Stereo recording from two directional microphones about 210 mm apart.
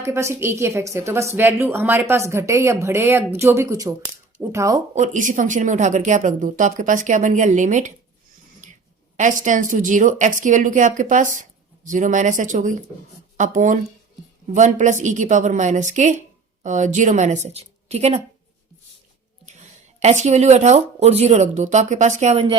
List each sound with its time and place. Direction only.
0.0 s a woman's voice: 15° right (ahead or behind)
4.9 s speech: 35° right (ahead or behind)
9.1 s speech: 35° right (ahead or behind)
19.5 s speech: 35° right (ahead or behind)